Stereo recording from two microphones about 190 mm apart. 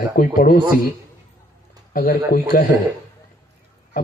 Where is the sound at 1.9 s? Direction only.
50° left (ahead or behind).